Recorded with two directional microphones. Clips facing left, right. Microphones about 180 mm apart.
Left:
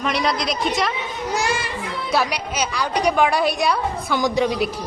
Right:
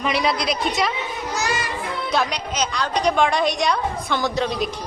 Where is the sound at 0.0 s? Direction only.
Centre (ahead or behind).